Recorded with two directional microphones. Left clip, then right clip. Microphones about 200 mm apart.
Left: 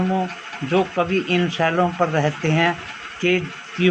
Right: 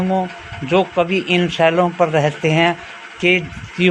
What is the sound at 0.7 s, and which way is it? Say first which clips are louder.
Speech: right 4 dB; 45° right (ahead or behind).